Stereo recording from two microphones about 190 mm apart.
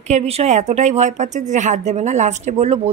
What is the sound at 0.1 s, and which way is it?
A woman's voice, 35° right (ahead or behind).